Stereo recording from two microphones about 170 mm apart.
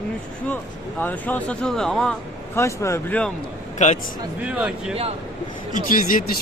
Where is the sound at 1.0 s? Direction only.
10° left (ahead or behind).